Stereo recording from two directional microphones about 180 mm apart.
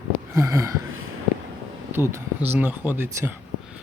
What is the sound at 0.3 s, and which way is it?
Speech, 20° right (ahead or behind).